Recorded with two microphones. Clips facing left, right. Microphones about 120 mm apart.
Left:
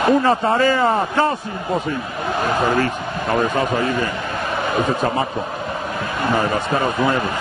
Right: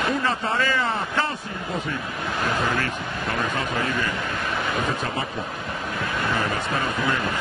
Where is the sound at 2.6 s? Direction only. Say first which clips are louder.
Left 7 dB; 35° left (ahead or behind).